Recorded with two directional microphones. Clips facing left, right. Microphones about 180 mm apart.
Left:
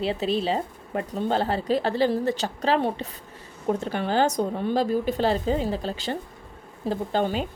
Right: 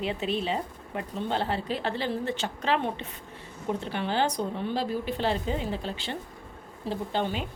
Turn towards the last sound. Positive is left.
turn(degrees=40)  # may be behind; listen again after turning